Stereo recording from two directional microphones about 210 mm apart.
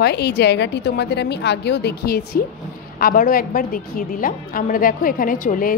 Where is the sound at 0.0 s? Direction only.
50° left (ahead or behind).